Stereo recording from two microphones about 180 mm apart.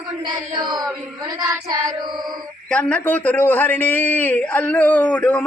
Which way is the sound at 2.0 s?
25° right (ahead or behind).